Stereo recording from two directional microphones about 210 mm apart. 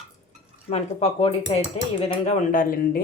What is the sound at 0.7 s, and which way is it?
A woman's voice, 30° left (ahead or behind).